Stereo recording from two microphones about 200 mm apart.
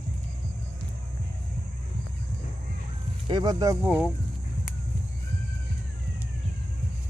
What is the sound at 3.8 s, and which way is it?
Speech, 5° right (ahead or behind).